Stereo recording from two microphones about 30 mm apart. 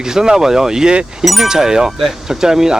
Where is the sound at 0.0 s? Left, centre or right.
Right.